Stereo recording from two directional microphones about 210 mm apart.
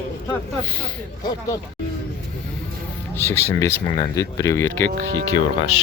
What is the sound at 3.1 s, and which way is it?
Speech, 10° left (ahead or behind).